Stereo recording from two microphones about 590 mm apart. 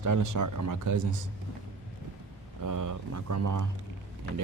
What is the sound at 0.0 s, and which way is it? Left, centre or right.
Speech, right.